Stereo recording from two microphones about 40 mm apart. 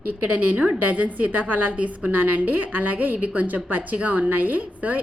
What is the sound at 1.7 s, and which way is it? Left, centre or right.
A woman's voice, right.